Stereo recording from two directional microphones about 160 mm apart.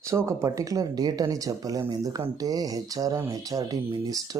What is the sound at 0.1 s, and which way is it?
Speech, 20° right (ahead or behind).